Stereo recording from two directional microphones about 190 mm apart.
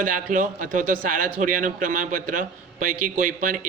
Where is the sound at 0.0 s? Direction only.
45° right (ahead or behind).